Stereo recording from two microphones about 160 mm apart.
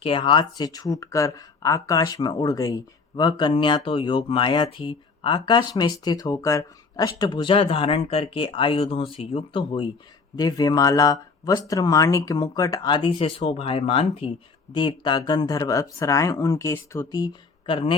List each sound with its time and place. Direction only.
0.0 s speech: 35° left (ahead or behind)
17.7 s a man's voice: 30° left (ahead or behind)